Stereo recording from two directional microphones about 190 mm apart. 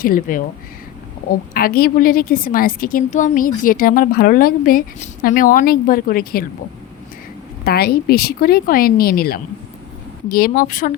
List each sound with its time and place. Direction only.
0.0 s a woman's voice: 45° left (ahead or behind)
1.5 s a woman's voice: 50° left (ahead or behind)
7.6 s a woman's voice: 55° left (ahead or behind)